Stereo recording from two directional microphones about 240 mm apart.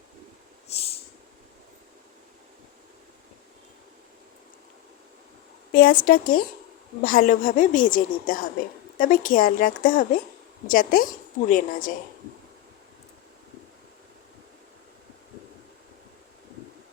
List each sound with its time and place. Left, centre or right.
0.7 s snort: left
5.7 s a woman's voice: left